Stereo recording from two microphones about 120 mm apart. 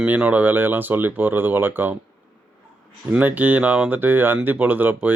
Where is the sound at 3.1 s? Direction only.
15° right (ahead or behind).